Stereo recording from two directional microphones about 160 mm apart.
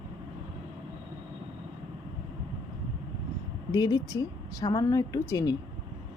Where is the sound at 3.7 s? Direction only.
25° left (ahead or behind).